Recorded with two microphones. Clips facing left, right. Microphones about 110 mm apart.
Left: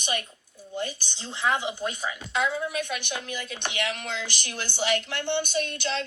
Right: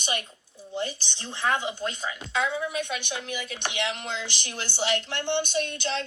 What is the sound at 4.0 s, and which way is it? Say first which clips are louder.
Speech: even; 50° left (ahead or behind).